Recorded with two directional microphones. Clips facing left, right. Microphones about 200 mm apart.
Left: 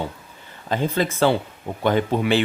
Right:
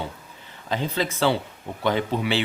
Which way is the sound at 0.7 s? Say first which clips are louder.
Left 4 dB; 50° left (ahead or behind).